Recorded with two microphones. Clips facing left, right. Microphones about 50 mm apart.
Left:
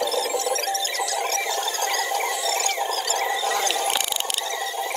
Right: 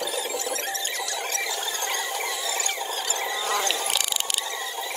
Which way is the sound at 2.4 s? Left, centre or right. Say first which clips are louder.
Left 5 dB; centre.